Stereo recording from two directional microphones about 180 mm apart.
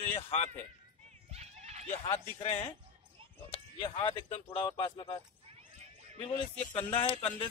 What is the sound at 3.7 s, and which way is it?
Speech, 30° left (ahead or behind).